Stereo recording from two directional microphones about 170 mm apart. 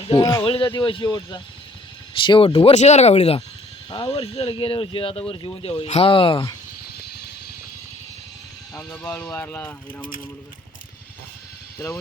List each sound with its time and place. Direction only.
0.2 s speech: 20° left (ahead or behind)
8.9 s speech: 15° left (ahead or behind)
11.8 s speech: 15° left (ahead or behind)